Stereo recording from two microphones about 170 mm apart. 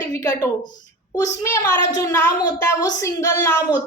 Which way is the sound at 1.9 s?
15° left (ahead or behind).